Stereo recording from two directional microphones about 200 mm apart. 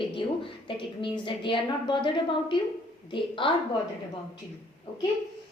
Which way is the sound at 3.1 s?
25° left (ahead or behind).